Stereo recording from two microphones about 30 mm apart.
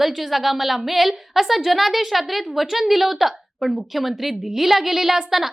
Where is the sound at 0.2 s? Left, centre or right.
Centre.